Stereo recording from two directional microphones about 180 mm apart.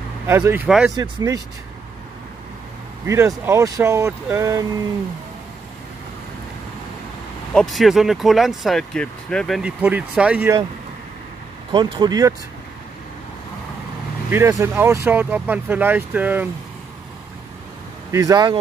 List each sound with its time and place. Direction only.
0.3 s speech: 10° right (ahead or behind)
0.9 s speech: 20° right (ahead or behind)
3.1 s speech: 15° right (ahead or behind)
7.5 s speech: centre (ahead or behind)
9.6 s speech: 10° right (ahead or behind)
11.7 s speech: 25° right (ahead or behind)
14.3 s speech: 15° right (ahead or behind)
18.1 s speech: 20° right (ahead or behind)